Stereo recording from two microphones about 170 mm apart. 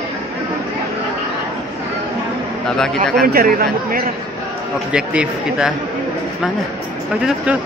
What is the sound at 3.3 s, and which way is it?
Speech, 60° right (ahead or behind).